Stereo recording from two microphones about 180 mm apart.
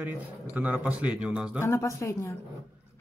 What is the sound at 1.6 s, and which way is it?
Speech, 15° left (ahead or behind).